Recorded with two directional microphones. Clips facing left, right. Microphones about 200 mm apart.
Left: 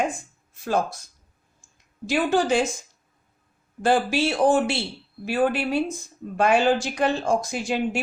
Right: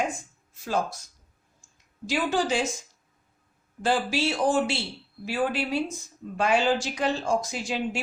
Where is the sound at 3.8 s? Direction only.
55° left (ahead or behind).